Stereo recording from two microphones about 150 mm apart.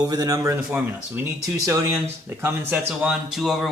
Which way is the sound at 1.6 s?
15° right (ahead or behind).